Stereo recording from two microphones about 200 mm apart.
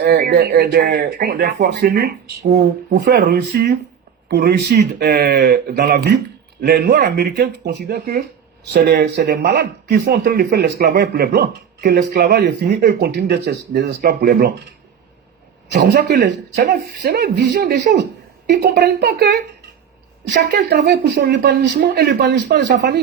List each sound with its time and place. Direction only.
0.0 s a man's voice: 45° right (ahead or behind)
15.7 s a man's voice: 55° right (ahead or behind)